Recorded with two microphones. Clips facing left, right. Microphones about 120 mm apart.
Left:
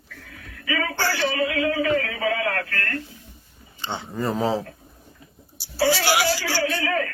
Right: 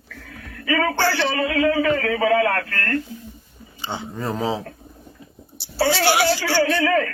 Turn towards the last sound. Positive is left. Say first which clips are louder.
# right 5 dB
turn(degrees=-60)  # may be behind; listen again after turning